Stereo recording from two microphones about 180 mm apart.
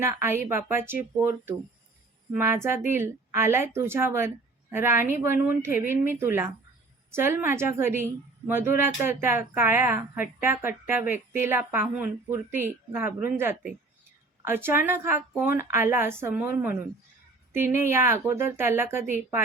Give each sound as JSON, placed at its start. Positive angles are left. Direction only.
{"t": 0.0, "sound": "a woman's voice", "side_deg": -15}